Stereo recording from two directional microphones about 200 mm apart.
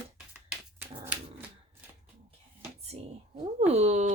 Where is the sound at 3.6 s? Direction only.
35° right (ahead or behind).